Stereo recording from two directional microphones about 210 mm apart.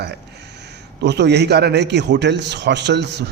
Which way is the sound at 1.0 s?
55° right (ahead or behind).